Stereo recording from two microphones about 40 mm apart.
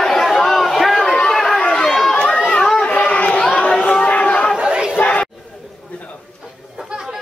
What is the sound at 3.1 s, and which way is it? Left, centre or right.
Chatter, left.